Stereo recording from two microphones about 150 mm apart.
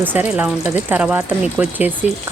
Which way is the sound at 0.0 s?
10° right (ahead or behind).